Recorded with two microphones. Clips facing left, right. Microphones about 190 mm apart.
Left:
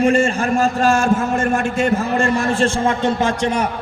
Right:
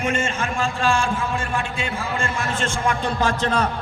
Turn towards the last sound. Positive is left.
turn(degrees=15)  # may be behind; listen again after turning